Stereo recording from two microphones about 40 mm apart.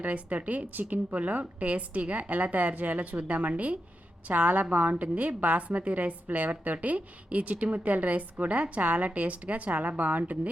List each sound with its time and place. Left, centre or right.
0.0 s a woman's voice: right
0.7 s speech: right
1.1 s a woman's voice: right